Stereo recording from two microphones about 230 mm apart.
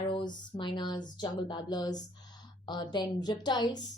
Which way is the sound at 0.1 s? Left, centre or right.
Left.